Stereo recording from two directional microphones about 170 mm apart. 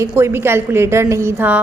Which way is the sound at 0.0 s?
15° right (ahead or behind).